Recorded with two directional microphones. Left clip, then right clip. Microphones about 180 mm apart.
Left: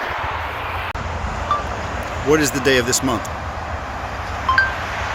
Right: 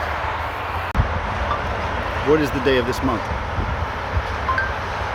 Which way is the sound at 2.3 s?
20° left (ahead or behind).